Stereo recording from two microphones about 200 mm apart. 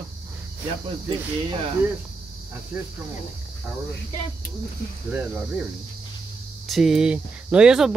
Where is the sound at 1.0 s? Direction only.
25° right (ahead or behind).